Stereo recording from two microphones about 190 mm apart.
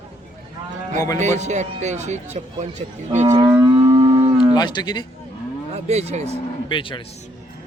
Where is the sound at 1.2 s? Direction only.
35° right (ahead or behind).